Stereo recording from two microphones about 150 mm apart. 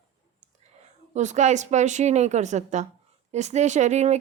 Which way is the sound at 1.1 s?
50° right (ahead or behind).